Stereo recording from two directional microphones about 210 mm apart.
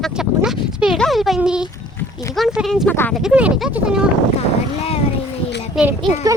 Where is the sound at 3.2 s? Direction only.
5° right (ahead or behind).